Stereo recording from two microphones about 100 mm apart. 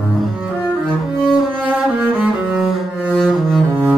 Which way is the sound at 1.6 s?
10° right (ahead or behind).